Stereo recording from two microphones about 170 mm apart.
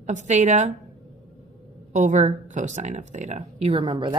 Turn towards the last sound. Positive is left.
turn(degrees=-30)  # may be behind; listen again after turning